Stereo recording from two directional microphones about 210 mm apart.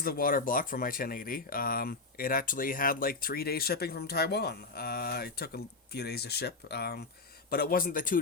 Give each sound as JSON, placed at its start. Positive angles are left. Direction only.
{"t": 0.0, "sound": "a man's voice", "side_deg": 45}